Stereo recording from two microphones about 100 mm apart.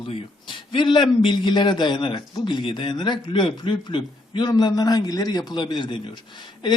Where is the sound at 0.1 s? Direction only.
60° left (ahead or behind).